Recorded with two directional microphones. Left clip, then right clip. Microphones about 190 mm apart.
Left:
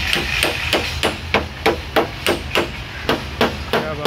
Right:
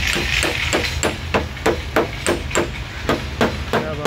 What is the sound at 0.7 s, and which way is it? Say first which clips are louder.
Hammer: left 1 dB; centre (ahead or behind).